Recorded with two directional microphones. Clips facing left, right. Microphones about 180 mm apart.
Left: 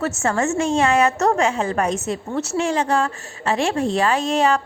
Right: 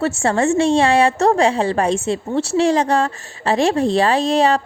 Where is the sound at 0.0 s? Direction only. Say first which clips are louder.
Right 4 dB; 30° right (ahead or behind).